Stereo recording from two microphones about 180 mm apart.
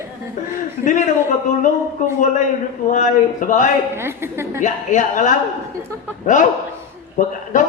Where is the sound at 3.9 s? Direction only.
15° right (ahead or behind).